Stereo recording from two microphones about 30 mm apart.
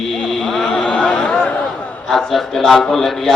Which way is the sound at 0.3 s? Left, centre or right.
Centre.